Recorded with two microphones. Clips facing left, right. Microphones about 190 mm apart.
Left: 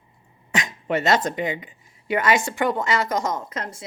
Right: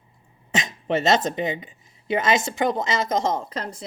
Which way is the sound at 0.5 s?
25° right (ahead or behind).